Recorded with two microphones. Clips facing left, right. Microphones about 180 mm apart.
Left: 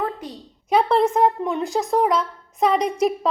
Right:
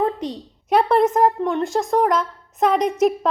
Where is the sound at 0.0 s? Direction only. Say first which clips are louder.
Right 5 dB; 25° right (ahead or behind).